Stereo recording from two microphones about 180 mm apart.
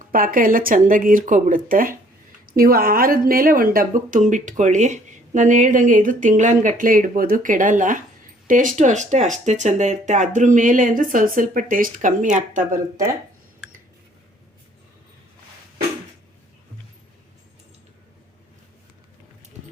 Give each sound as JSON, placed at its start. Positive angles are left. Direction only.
{"t": 0.1, "sound": "speech", "side_deg": -50}